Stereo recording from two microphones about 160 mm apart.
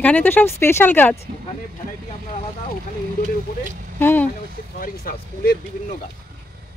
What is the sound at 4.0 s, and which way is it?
Speech, 15° left (ahead or behind).